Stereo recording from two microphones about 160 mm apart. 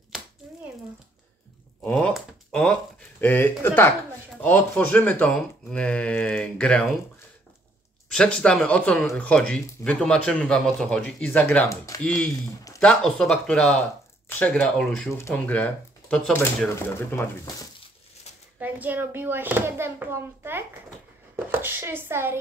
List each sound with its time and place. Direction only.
1.8 s a sound: 5° left (ahead or behind)
3.2 s speech: 10° left (ahead or behind)
8.1 s speech: 5° left (ahead or behind)
12.0 s speech: 5° left (ahead or behind)
15.0 s speech: 15° left (ahead or behind)
18.6 s speech: 10° right (ahead or behind)